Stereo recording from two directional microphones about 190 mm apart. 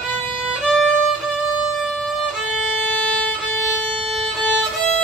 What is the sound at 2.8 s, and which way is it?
Violin, 5° left (ahead or behind).